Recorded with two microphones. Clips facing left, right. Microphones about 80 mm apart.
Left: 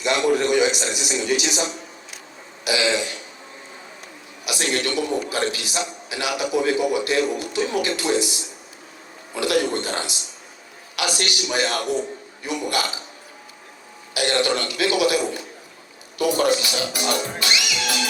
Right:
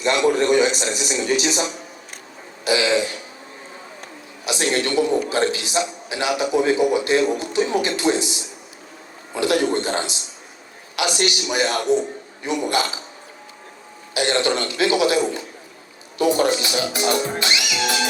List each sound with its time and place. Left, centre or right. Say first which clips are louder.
0.3 s speech: right 2 dB; right
2.6 s speech: right 3 dB; right
4.4 s a man's voice: right 3 dB; right
14.1 s a sound: right 1 dB; right
16.1 s music: right 1 dB; right